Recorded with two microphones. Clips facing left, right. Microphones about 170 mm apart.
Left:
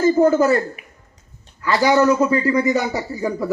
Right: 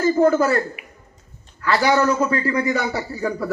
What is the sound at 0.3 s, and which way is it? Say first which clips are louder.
Speech: left 2 dB; 20° left (ahead or behind).